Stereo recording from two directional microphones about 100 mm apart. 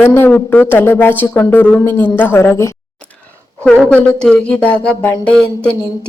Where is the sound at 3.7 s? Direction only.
10° left (ahead or behind).